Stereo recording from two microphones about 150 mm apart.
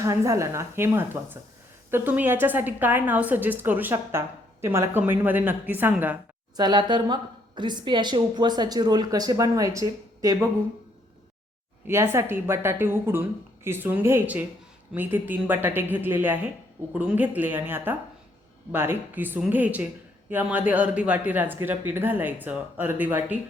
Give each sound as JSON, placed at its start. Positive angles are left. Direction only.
{"t": 0.0, "sound": "a woman's voice", "side_deg": -20}
{"t": 6.6, "sound": "a woman's voice", "side_deg": -30}
{"t": 11.9, "sound": "speech", "side_deg": -15}